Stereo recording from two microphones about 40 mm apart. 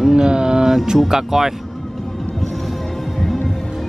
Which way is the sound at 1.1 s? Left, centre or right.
Centre.